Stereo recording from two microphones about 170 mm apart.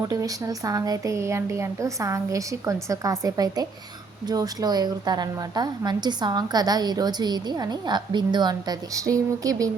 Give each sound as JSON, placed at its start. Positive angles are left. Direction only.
{"t": 0.1, "sound": "a woman's voice", "side_deg": -20}